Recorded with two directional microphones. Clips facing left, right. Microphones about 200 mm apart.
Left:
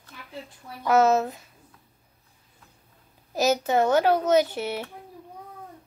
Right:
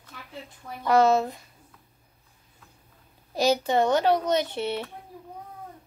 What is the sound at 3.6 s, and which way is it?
Speech, 5° left (ahead or behind).